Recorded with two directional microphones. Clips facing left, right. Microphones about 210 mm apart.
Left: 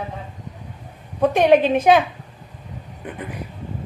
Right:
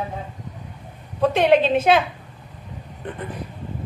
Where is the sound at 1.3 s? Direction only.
15° left (ahead or behind).